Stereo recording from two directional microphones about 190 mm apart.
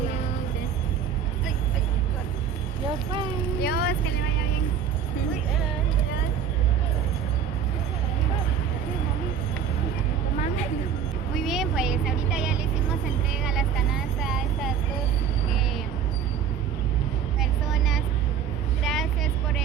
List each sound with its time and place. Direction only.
3.6 s vehicle: 55° left (ahead or behind)
11.3 s vehicle: centre (ahead or behind)
17.4 s vehicle: centre (ahead or behind)